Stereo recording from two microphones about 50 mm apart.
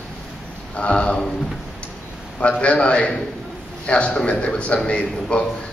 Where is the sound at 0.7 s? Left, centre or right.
Left.